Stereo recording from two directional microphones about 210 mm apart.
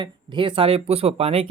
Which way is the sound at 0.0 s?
25° right (ahead or behind).